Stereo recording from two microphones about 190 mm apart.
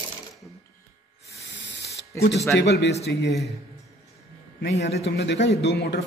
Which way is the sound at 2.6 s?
60° left (ahead or behind).